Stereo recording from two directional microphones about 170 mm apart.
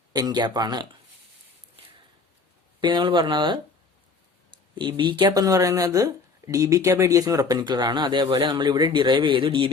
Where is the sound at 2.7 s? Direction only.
30° right (ahead or behind).